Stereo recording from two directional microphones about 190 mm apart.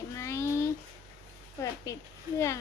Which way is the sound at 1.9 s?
15° left (ahead or behind).